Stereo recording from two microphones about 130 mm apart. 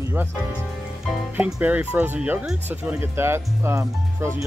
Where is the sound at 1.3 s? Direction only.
10° right (ahead or behind).